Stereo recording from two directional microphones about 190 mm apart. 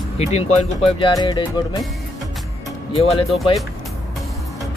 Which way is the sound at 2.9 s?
30° left (ahead or behind).